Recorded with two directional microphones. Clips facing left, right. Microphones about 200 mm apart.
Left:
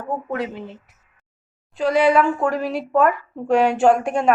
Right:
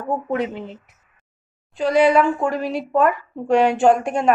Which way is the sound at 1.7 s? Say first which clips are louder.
Right 1 dB; centre (ahead or behind).